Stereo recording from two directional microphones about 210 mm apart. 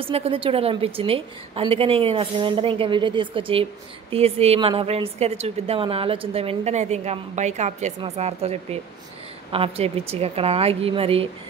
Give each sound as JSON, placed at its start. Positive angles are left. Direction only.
{"t": 0.0, "sound": "a woman's voice", "side_deg": -25}